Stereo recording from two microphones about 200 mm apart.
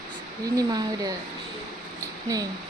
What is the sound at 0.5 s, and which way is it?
Speech, 20° right (ahead or behind).